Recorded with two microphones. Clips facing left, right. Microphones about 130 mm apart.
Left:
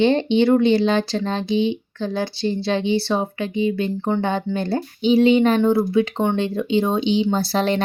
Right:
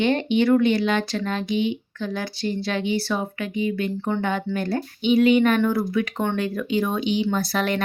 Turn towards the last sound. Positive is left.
turn(degrees=30)  # may be behind; listen again after turning